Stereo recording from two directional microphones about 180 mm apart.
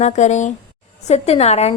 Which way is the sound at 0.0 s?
40° left (ahead or behind).